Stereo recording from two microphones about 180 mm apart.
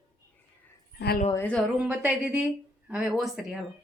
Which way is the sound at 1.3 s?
10° left (ahead or behind).